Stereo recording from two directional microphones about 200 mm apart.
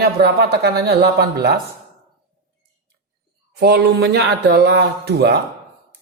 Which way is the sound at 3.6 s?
55° right (ahead or behind).